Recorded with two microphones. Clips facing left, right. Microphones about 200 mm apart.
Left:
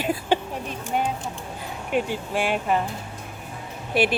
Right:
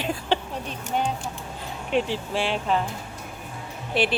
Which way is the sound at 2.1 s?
50° left (ahead or behind).